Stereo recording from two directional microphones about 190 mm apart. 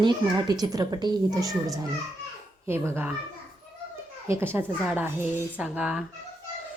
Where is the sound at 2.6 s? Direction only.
15° right (ahead or behind).